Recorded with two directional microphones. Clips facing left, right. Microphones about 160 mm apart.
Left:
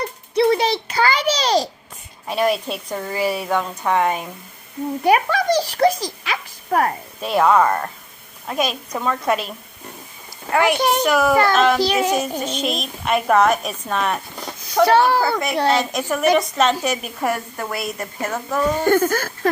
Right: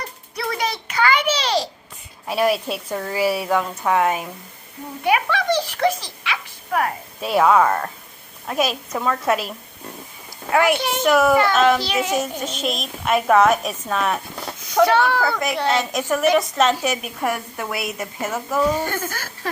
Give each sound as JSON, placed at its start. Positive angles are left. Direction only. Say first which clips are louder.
{"t": 0.3, "sound": "a sound", "louder": "left 9 dB", "side_deg": 30}
{"t": 2.2, "sound": "a woman's voice", "louder": "even", "side_deg": -5}
{"t": 5.0, "sound": "a sound", "louder": "left 2 dB", "side_deg": 40}
{"t": 7.2, "sound": "a woman's voice", "louder": "even", "side_deg": -5}
{"t": 10.5, "sound": "a woman's voice", "louder": "even", "side_deg": 0}
{"t": 10.8, "sound": "speech", "louder": "left 6 dB", "side_deg": 40}
{"t": 11.0, "sound": "a woman's voice", "louder": "right 3 dB", "side_deg": 0}
{"t": 11.8, "sound": "speech", "louder": "left 5 dB", "side_deg": 40}
{"t": 12.1, "sound": "a woman's voice", "louder": "left 2 dB", "side_deg": 0}
{"t": 14.8, "sound": "speech", "louder": "left 7 dB", "side_deg": 35}
{"t": 15.7, "sound": "a woman's voice", "louder": "left 1 dB", "side_deg": 0}
{"t": 18.9, "sound": "speech", "louder": "left 11 dB", "side_deg": 50}